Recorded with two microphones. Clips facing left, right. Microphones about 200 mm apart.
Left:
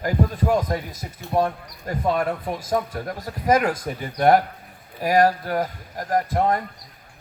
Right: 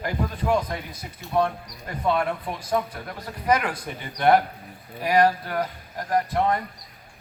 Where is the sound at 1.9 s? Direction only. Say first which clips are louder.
Left 2 dB; 40° left (ahead or behind).